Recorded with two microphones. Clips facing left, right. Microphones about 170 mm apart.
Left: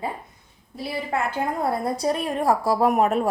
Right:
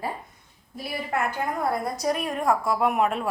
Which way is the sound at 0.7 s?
25° left (ahead or behind).